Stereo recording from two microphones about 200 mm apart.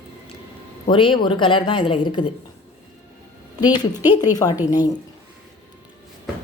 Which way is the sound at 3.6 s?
20° left (ahead or behind).